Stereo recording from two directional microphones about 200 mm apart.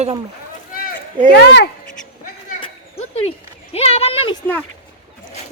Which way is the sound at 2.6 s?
30° left (ahead or behind).